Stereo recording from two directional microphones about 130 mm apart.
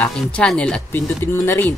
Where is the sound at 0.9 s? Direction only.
20° left (ahead or behind).